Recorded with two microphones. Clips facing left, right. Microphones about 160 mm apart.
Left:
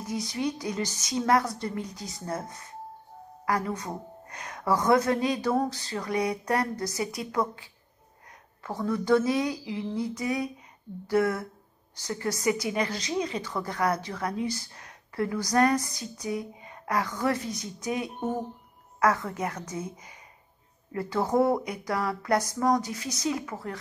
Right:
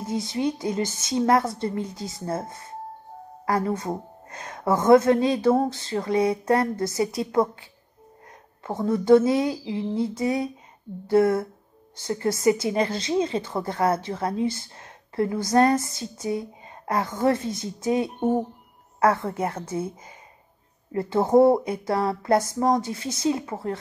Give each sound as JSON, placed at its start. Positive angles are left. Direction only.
{"t": 0.0, "sound": "a woman's voice", "side_deg": -25}